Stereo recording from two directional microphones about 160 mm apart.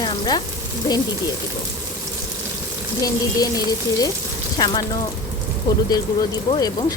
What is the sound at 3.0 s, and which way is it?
Speech, 25° left (ahead or behind).